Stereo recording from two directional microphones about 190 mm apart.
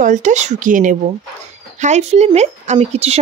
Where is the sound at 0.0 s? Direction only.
40° right (ahead or behind).